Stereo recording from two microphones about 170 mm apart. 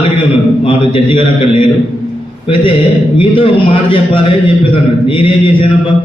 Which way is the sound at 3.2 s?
30° left (ahead or behind).